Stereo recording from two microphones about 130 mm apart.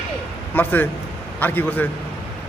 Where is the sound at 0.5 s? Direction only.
15° left (ahead or behind).